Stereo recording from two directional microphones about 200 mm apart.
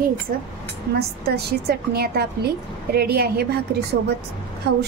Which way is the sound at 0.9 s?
50° right (ahead or behind).